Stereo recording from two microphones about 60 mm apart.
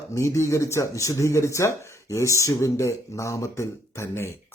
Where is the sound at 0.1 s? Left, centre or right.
Left.